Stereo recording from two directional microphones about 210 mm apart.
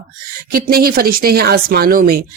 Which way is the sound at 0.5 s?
45° right (ahead or behind).